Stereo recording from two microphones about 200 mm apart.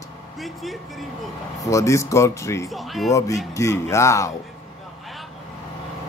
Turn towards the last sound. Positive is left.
turn(degrees=15)  # may be behind; listen again after turning